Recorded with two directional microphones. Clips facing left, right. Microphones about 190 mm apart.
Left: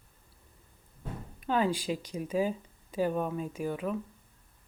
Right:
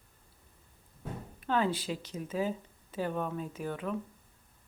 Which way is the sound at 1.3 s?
10° left (ahead or behind).